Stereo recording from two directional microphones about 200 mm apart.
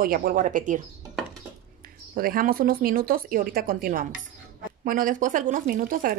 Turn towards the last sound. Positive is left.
turn(degrees=-45)  # may be behind; listen again after turning